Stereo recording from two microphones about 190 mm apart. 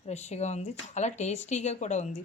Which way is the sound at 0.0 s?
35° left (ahead or behind).